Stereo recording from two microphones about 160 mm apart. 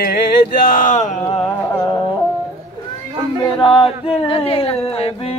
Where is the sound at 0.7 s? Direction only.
55° left (ahead or behind).